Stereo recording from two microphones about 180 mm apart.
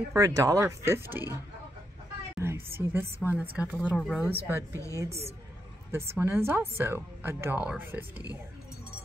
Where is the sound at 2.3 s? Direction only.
15° right (ahead or behind).